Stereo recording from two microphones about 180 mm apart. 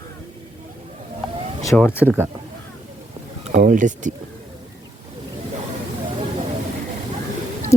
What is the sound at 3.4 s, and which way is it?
Speech, 45° right (ahead or behind).